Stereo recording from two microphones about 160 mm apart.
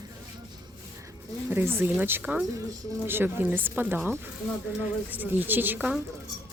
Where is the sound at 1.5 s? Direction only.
15° right (ahead or behind).